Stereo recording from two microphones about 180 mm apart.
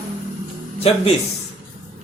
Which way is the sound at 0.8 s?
35° left (ahead or behind).